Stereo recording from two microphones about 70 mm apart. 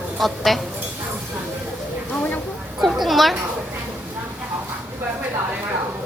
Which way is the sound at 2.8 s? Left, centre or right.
Centre.